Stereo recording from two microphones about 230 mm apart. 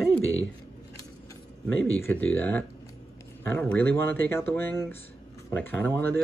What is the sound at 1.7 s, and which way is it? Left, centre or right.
Speech, left.